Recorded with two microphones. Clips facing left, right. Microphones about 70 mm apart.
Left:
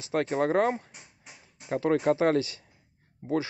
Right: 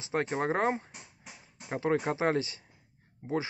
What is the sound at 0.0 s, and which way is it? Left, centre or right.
Speech, right.